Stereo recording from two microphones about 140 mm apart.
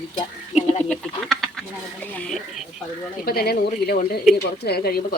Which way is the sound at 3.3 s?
90° left.